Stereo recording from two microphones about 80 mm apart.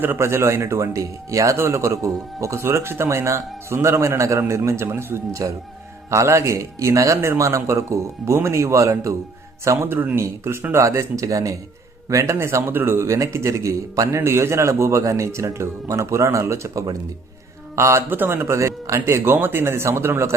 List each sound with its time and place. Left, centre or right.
0.0 s speech: right
9.6 s a man's voice: right
18.1 s speech: right